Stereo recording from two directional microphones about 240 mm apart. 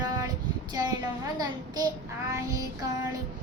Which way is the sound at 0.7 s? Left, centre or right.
Centre.